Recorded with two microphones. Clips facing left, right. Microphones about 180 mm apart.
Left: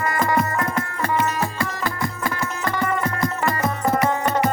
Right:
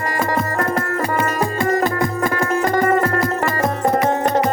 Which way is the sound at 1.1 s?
50° right (ahead or behind).